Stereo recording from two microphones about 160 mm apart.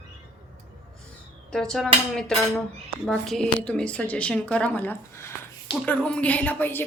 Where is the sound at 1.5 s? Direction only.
5° left (ahead or behind).